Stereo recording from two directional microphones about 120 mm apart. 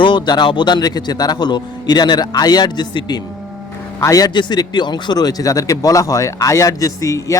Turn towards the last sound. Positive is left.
turn(degrees=30)  # may be behind; listen again after turning